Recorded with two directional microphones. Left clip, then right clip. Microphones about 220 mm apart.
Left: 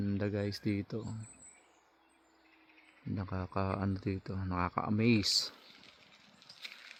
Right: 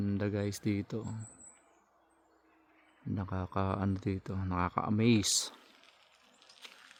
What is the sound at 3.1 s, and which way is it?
Speech, 25° right (ahead or behind).